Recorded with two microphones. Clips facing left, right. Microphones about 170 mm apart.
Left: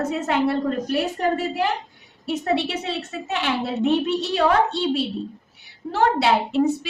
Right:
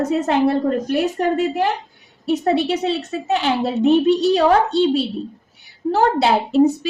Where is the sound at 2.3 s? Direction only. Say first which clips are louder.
Right 5 dB; 35° right (ahead or behind).